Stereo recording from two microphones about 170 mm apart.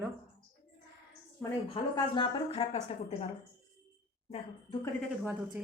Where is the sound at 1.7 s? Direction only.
30° left (ahead or behind).